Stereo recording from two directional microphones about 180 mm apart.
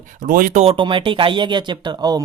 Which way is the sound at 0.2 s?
50° right (ahead or behind).